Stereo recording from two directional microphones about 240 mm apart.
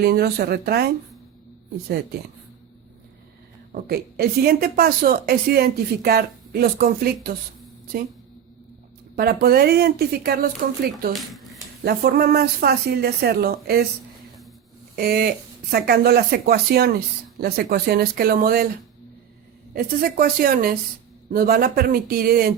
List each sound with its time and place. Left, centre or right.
0.0 s a woman's voice: right
3.7 s a woman's voice: right
9.1 s a woman's voice: right
11.1 s speech: centre
11.9 s a woman's voice: right
14.9 s a woman's voice: right
19.7 s a woman's voice: right